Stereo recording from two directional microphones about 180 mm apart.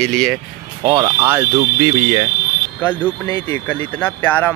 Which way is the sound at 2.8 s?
10° left (ahead or behind).